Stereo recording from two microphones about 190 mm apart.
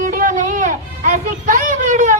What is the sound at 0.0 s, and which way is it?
Music, 45° right (ahead or behind).